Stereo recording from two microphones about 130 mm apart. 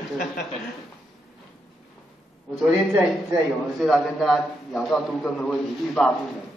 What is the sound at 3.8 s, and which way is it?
A man's voice, centre (ahead or behind).